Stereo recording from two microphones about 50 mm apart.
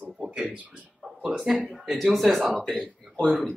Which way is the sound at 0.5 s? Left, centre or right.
Right.